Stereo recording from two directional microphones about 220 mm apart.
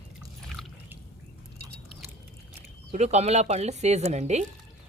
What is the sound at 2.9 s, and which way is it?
Speech, 30° right (ahead or behind).